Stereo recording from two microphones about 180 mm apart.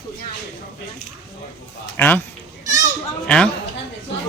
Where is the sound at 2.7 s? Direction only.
20° right (ahead or behind).